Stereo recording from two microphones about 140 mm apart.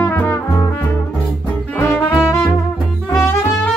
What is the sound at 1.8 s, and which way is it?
Music, 20° left (ahead or behind).